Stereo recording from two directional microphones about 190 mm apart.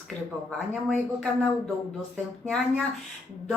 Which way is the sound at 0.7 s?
5° left (ahead or behind).